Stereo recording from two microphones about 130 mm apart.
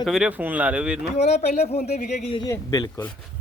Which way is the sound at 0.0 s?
5° right (ahead or behind).